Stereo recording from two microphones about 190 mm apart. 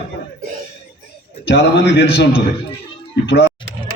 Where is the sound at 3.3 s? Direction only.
60° left (ahead or behind).